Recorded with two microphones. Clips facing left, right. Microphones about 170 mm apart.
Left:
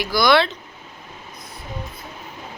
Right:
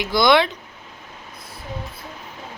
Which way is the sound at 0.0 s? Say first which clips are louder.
Right 1 dB; 20° right (ahead or behind).